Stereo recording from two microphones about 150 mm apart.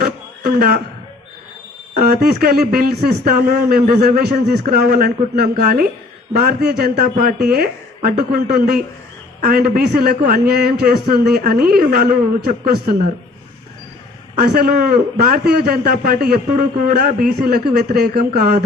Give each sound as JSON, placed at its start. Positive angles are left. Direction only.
{"t": 2.4, "sound": "a man's voice", "side_deg": -85}
{"t": 6.4, "sound": "a man's voice", "side_deg": -90}
{"t": 7.4, "sound": "a man's voice", "side_deg": -85}
{"t": 14.4, "sound": "a man's voice", "side_deg": -85}